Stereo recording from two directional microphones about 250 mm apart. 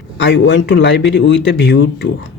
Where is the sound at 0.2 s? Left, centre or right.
Left.